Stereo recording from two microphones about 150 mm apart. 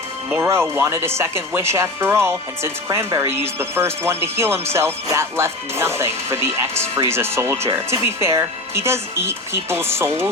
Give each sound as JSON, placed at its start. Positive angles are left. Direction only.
{"t": 0.3, "sound": "speech", "side_deg": -15}